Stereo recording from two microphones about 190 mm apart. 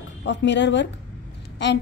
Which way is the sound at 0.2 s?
65° left (ahead or behind).